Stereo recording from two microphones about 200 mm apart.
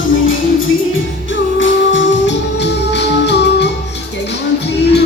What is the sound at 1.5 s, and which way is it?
Music, 70° left (ahead or behind).